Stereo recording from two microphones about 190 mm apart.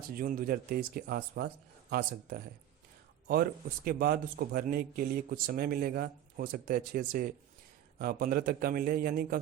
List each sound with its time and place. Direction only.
0.1 s speech: 50° right (ahead or behind)